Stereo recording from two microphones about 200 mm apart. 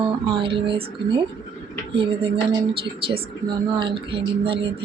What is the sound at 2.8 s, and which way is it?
Speech, 25° right (ahead or behind).